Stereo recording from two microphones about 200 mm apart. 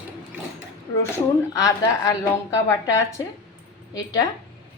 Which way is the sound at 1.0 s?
15° left (ahead or behind).